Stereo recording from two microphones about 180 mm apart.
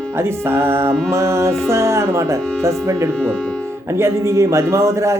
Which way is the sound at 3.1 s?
5° left (ahead or behind).